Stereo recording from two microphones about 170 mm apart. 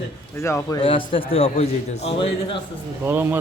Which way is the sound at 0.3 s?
15° left (ahead or behind).